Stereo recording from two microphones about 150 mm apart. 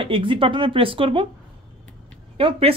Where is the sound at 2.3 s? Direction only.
40° right (ahead or behind).